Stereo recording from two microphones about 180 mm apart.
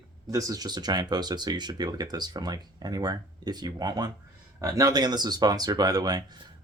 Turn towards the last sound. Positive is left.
turn(degrees=-20)  # may be behind; listen again after turning